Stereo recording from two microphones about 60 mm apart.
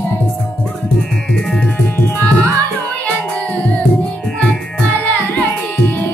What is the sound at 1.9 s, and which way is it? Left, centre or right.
Music, left.